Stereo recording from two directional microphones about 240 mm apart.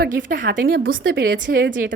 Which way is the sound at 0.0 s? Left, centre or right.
Right.